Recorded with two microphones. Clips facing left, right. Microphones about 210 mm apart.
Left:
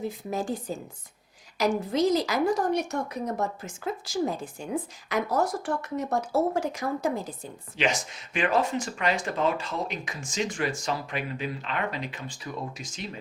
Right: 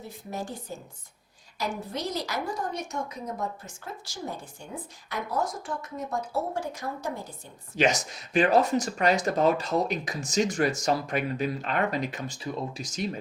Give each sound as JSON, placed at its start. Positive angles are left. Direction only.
{"t": 0.0, "sound": "a woman's voice", "side_deg": 90}
{"t": 7.8, "sound": "speech", "side_deg": -40}